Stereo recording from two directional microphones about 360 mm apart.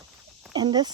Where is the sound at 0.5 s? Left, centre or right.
Centre.